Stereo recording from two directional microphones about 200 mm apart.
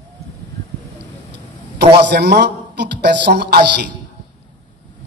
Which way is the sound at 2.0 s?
55° right (ahead or behind).